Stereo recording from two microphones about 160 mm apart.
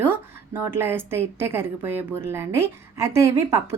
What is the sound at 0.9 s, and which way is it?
A woman's voice, 15° right (ahead or behind).